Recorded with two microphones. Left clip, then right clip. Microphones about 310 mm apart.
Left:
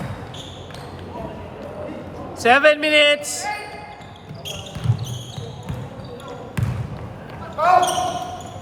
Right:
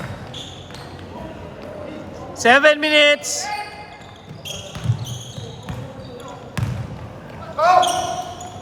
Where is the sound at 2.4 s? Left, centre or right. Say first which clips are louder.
Right 1 dB; right.